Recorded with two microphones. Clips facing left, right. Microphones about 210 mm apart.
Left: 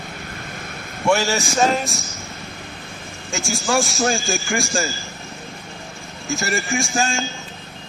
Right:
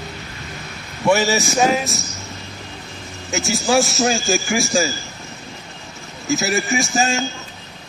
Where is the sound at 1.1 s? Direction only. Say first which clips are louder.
Right 2 dB; centre (ahead or behind).